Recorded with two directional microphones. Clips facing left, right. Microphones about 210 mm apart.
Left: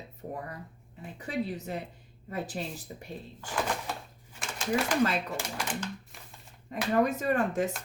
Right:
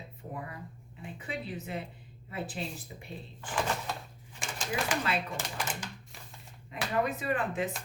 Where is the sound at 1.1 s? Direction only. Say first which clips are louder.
Left 6 dB; 40° left (ahead or behind).